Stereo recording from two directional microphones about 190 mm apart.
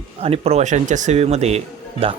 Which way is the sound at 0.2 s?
30° right (ahead or behind).